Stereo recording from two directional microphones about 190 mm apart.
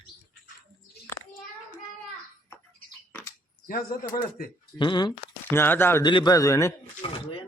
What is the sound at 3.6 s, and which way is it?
Speech, 50° left (ahead or behind).